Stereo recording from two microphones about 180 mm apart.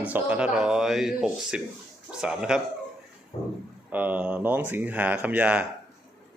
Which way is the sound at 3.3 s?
35° left (ahead or behind).